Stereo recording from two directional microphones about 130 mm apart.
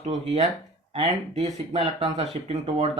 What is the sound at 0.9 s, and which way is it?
Speech, 55° right (ahead or behind).